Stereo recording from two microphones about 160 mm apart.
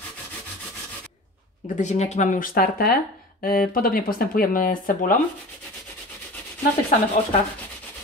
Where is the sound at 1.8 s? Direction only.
45° left (ahead or behind).